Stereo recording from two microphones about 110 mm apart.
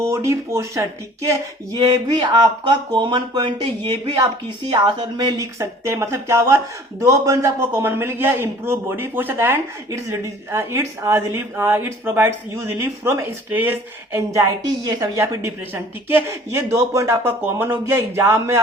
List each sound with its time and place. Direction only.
0.0 s a man's voice: 25° right (ahead or behind)
2.1 s a man's voice: 40° right (ahead or behind); by 14.2 s 15° right (ahead or behind)
15.2 s a man's voice: 25° right (ahead or behind)